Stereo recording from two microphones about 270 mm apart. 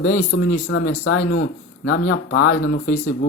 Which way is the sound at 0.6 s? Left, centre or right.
Left.